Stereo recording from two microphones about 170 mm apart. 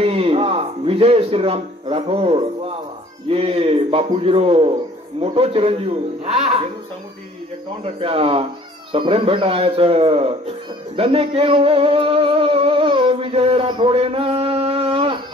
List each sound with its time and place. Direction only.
0.0 s a sound: 35° right (ahead or behind)
3.3 s a man's voice: 35° right (ahead or behind)
7.8 s a man's voice: 35° right (ahead or behind)
11.0 s music: 35° right (ahead or behind)